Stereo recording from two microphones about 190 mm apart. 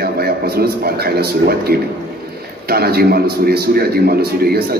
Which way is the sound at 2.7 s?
55° right (ahead or behind).